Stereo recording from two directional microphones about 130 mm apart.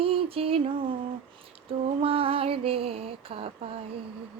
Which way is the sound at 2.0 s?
45° right (ahead or behind).